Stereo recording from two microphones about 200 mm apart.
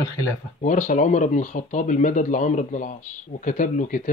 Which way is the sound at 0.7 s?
40° left (ahead or behind).